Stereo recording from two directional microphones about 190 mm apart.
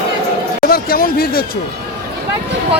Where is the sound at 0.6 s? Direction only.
50° left (ahead or behind).